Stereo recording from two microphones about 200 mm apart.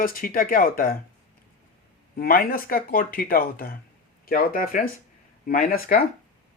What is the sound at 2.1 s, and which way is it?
Speech, 45° left (ahead or behind).